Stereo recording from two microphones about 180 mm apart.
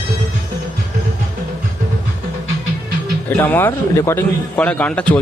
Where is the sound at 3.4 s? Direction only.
10° left (ahead or behind).